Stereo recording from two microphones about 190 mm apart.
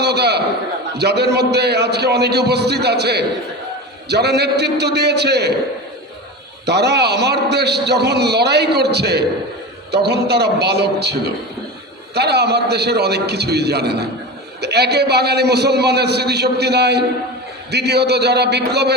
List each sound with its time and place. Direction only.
0.0 s a sound: 60° right (ahead or behind)
0.9 s a man's voice: 60° right (ahead or behind)
6.7 s a man's voice: 60° right (ahead or behind)